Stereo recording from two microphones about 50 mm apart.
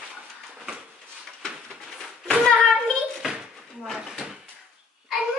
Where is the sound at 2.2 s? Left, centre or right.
Centre.